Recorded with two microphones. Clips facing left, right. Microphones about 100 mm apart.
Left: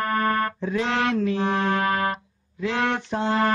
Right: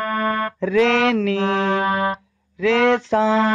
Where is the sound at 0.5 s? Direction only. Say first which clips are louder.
Right 8 dB; 90° right.